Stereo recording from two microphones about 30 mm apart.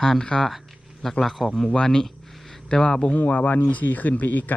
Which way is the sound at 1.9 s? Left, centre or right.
Centre.